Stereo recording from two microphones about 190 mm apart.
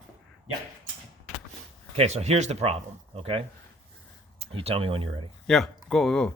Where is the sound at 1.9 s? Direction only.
35° right (ahead or behind).